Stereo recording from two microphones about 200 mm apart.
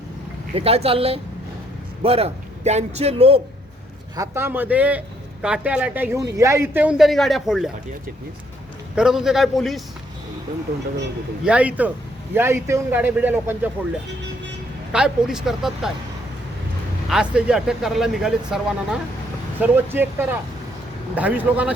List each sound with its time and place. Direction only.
0.5 s a woman's voice: 30° right (ahead or behind)
4.1 s a man's voice: 15° right (ahead or behind)
9.0 s speech: centre (ahead or behind)
11.4 s a man's voice: 5° right (ahead or behind)
14.9 s speech: 5° right (ahead or behind)
17.1 s a man's voice: 5° right (ahead or behind)